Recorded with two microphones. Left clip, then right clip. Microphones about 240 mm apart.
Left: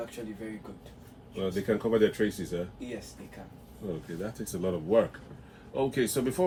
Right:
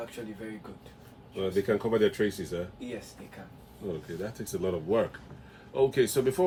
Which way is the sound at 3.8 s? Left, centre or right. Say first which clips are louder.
Right 1 dB; right.